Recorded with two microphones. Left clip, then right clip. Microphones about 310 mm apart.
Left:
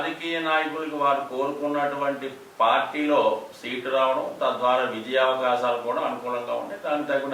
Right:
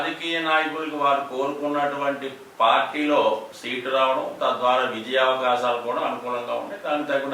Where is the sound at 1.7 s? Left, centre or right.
Centre.